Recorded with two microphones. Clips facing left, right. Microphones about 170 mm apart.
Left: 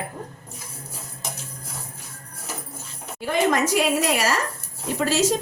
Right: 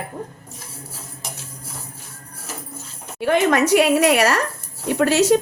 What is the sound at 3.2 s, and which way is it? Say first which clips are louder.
A woman's voice: right 4 dB; 65° right (ahead or behind).